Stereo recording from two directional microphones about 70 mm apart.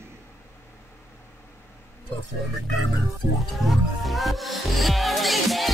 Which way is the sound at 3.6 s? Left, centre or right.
Centre.